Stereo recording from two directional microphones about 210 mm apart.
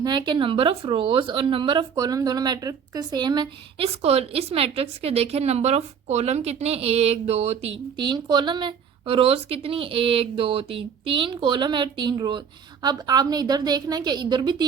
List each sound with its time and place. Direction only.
0.0 s speech: 20° right (ahead or behind)